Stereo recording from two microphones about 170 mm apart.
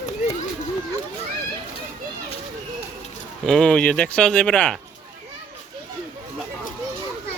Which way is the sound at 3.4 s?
5° left (ahead or behind).